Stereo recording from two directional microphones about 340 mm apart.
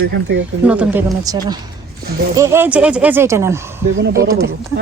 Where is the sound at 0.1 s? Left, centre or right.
Right.